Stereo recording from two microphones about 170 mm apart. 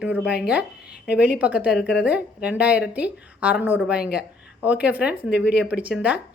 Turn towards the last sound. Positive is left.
turn(degrees=-5)  # may be behind; listen again after turning